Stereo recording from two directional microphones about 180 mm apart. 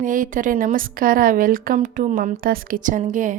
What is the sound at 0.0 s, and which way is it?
A woman's voice, 45° right (ahead or behind).